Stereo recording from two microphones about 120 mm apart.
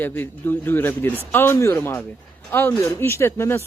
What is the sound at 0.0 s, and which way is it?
A man's voice, 15° left (ahead or behind).